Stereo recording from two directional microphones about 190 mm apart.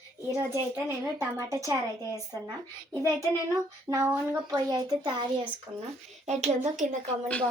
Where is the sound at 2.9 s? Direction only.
15° right (ahead or behind).